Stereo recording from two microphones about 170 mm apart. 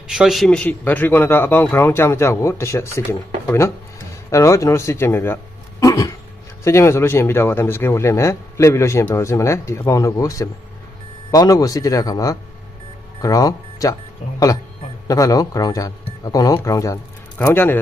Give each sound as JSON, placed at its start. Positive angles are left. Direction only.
{"t": 0.1, "sound": "speech", "side_deg": -5}
{"t": 5.8, "sound": "a sound", "side_deg": 20}
{"t": 6.7, "sound": "speech", "side_deg": 15}